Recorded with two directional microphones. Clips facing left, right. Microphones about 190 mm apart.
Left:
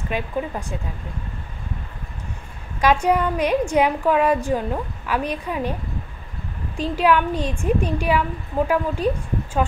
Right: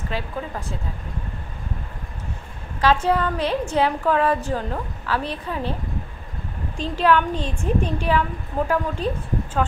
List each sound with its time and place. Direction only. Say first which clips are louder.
0.1 s a woman's voice: left 3 dB; 15° left (ahead or behind)
2.8 s a woman's voice: left 1 dB; 15° left (ahead or behind)
6.8 s a woman's voice: left 1 dB; 10° left (ahead or behind)